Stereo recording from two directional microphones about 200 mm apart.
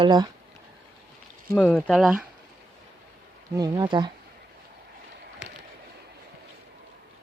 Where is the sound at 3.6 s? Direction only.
20° right (ahead or behind).